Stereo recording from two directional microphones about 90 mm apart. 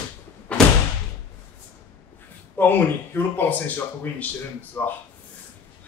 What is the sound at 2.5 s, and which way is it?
Speech, 20° left (ahead or behind).